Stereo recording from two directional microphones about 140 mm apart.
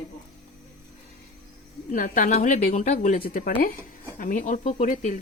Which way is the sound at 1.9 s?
80° left.